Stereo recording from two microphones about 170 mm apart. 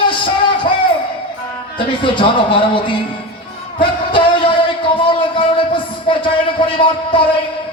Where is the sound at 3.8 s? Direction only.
30° left (ahead or behind).